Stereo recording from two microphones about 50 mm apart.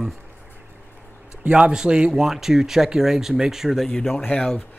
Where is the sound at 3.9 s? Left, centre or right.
Centre.